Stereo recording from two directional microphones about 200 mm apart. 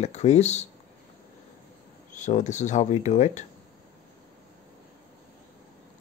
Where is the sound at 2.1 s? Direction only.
35° left (ahead or behind).